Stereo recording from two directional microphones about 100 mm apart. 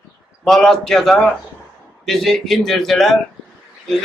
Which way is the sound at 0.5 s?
5° left (ahead or behind).